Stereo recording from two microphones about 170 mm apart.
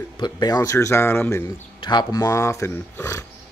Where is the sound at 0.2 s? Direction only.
25° left (ahead or behind).